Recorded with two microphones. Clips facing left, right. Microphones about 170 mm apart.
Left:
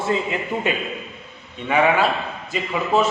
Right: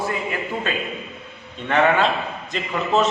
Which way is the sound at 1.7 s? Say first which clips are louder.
Even; 5° left (ahead or behind).